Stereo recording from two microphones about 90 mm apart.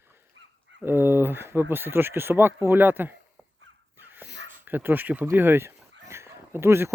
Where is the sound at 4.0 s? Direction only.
20° right (ahead or behind).